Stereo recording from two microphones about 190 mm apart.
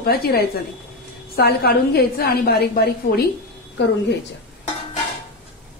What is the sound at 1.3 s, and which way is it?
A woman's voice, 55° left (ahead or behind).